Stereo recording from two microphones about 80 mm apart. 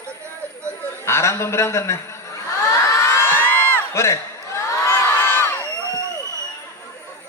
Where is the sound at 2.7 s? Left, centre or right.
Left.